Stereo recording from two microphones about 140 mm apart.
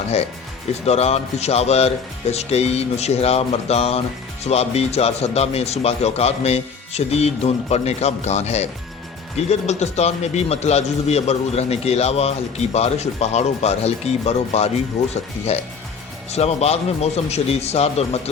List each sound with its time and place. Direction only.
0.9 s a man's voice: 50° left (ahead or behind)